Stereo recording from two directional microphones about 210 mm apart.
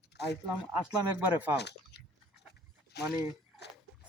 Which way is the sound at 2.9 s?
50° left (ahead or behind).